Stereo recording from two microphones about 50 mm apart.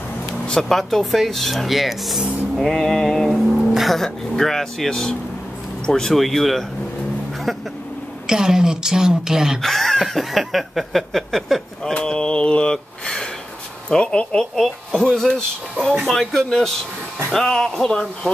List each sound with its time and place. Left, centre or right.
0.5 s speech: centre
2.7 s speech: centre
3.3 s speech: centre
8.3 s a woman's voice: centre
9.6 s speech: centre
11.8 s a sound: centre
13.8 s speech: centre
14.4 s speech: centre